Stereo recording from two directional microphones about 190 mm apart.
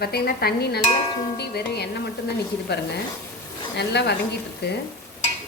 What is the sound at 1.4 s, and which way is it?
Music, 60° left (ahead or behind).